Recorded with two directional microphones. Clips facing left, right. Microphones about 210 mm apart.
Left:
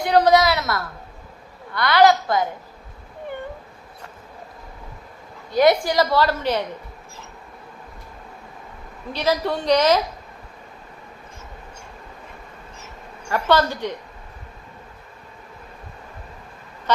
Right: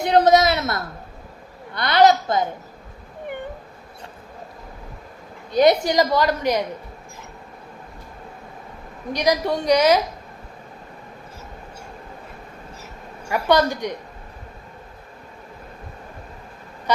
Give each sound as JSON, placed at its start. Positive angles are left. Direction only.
{"t": 0.0, "sound": "a woman's voice", "side_deg": -25}
{"t": 5.5, "sound": "a woman's voice", "side_deg": -20}
{"t": 9.1, "sound": "a woman's voice", "side_deg": -15}
{"t": 13.2, "sound": "a woman's voice", "side_deg": -10}